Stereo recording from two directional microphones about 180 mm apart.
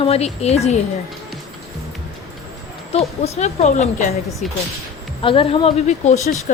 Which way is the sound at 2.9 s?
35° left (ahead or behind).